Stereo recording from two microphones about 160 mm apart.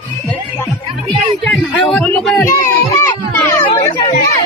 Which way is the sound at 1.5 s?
5° left (ahead or behind).